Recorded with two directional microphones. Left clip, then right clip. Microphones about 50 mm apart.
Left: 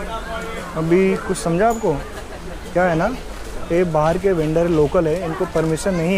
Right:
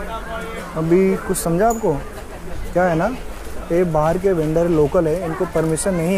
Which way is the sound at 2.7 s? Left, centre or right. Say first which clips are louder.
Even; centre.